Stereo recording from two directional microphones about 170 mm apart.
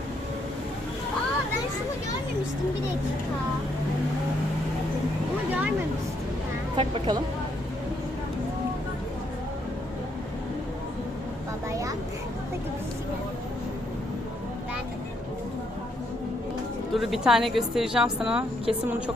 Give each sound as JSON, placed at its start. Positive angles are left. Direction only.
{"t": 6.7, "sound": "speech", "side_deg": -30}
{"t": 11.7, "sound": "a sound", "side_deg": -20}
{"t": 16.9, "sound": "a woman's voice", "side_deg": 0}